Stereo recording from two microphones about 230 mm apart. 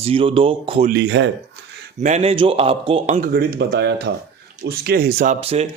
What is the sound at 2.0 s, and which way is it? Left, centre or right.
Speech, right.